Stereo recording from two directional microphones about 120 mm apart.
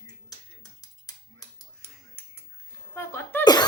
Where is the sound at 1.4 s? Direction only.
30° left (ahead or behind).